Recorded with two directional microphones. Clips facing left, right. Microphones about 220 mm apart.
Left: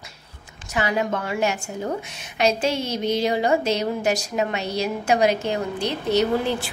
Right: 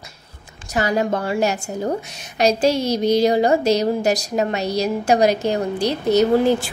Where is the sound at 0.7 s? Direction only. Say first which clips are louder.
Right 4 dB; 40° right (ahead or behind).